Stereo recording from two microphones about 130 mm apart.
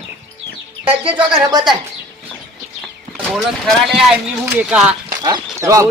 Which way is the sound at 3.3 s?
Centre (ahead or behind).